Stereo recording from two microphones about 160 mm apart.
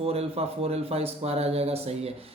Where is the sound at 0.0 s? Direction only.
40° right (ahead or behind).